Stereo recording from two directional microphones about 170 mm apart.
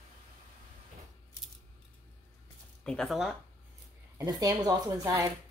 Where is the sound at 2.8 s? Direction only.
5° left (ahead or behind).